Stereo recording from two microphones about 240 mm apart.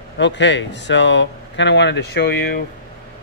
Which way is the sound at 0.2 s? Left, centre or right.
Left.